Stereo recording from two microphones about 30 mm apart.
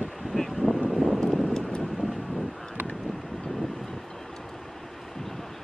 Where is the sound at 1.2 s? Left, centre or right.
Centre.